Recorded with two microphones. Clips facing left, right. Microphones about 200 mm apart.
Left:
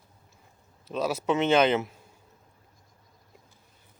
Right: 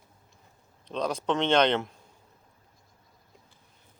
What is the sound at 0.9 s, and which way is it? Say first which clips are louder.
A man's voice: left 2 dB; 5° left (ahead or behind).